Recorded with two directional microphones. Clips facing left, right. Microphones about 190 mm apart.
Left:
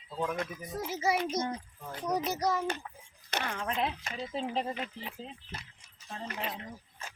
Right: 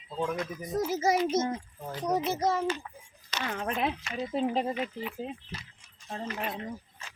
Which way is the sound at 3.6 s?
55° right (ahead or behind).